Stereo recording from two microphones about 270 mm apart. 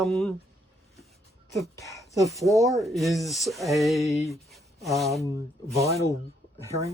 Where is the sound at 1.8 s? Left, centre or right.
Centre.